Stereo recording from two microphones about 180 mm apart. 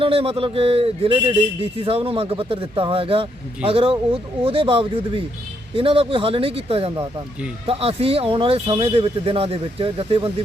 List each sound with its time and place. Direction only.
0.0 s a man's voice: 30° right (ahead or behind)